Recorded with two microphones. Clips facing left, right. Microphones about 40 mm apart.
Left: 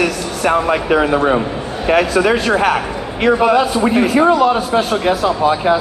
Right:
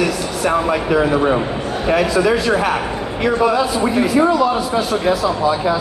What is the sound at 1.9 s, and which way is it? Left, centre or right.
A man's voice, left.